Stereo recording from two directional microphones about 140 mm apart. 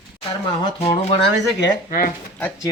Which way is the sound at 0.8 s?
40° left (ahead or behind).